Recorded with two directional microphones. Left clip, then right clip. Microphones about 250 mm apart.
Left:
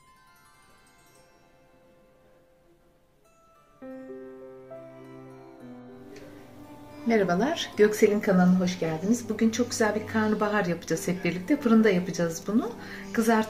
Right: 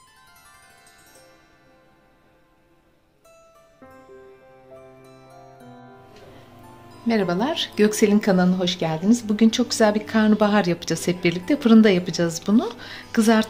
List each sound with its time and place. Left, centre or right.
7.1 s speech: right